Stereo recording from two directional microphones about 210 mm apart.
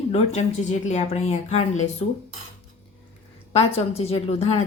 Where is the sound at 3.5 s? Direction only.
30° left (ahead or behind).